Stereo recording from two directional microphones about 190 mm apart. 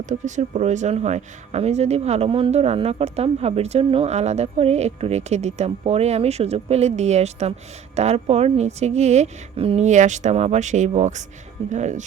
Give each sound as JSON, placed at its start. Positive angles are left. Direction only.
{"t": 0.1, "sound": "speech", "side_deg": -40}